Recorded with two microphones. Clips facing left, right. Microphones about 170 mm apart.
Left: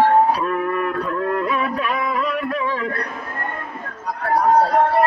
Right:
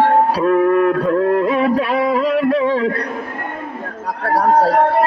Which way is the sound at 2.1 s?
90° right.